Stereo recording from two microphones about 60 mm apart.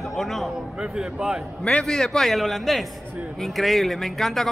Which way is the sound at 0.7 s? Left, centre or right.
Centre.